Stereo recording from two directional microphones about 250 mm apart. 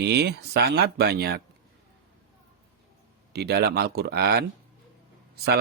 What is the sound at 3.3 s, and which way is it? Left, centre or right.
Speech, right.